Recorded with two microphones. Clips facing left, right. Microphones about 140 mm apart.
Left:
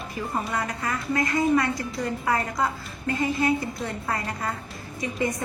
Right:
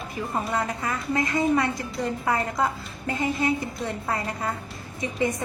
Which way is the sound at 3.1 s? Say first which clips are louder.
Left 1 dB; 20° right (ahead or behind).